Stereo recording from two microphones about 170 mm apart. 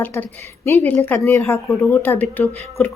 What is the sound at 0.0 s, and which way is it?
Speech, 10° left (ahead or behind).